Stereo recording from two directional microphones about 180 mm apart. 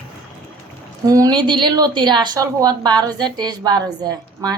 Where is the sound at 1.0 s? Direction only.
20° right (ahead or behind).